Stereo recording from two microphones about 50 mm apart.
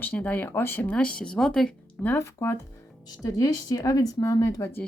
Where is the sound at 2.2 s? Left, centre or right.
Left.